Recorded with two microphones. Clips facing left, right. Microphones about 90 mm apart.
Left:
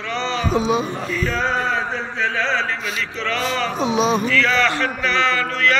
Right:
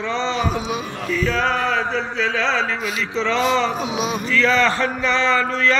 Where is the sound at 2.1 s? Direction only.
90° right.